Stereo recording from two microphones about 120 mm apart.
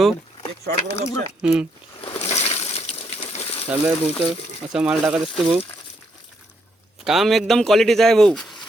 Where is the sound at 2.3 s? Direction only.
65° left (ahead or behind).